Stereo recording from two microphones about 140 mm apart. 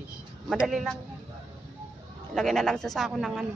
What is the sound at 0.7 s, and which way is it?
Speech, centre (ahead or behind).